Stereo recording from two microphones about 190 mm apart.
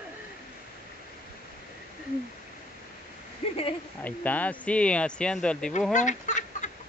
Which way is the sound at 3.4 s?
35° left (ahead or behind).